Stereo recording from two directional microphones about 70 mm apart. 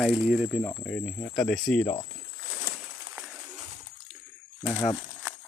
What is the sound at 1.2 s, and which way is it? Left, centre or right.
Speech, left.